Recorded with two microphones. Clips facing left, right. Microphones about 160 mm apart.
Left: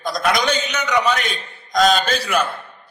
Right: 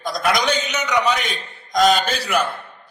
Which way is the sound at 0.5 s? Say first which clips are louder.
Left 1 dB; 15° right (ahead or behind).